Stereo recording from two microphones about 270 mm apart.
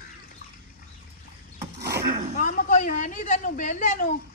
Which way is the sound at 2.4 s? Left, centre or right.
Left.